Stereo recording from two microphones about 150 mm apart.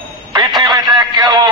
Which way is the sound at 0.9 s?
30° right (ahead or behind).